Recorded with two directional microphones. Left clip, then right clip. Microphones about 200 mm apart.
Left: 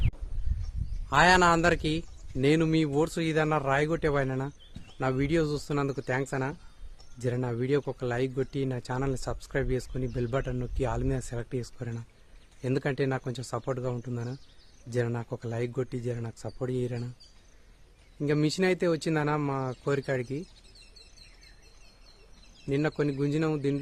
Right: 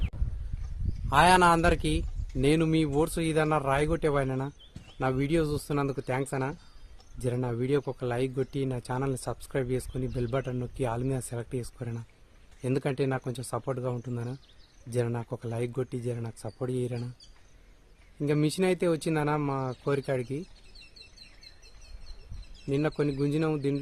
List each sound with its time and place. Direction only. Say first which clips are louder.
1.1 s speech: right 1 dB; 15° right (ahead or behind)
18.2 s speech: even; 15° right (ahead or behind)
22.6 s speech: even; 15° right (ahead or behind)